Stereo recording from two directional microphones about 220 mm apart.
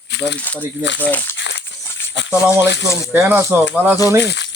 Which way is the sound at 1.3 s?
55° left (ahead or behind).